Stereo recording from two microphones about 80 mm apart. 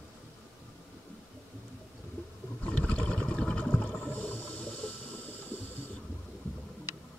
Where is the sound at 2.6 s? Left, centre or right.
Centre.